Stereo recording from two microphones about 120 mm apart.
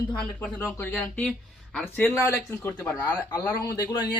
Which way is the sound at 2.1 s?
25° left (ahead or behind).